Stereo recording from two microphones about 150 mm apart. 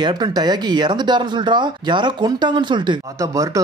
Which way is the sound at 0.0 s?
30° right (ahead or behind).